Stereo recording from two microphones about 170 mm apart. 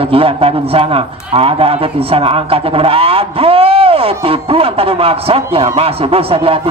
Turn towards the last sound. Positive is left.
turn(degrees=-35)  # may be behind; listen again after turning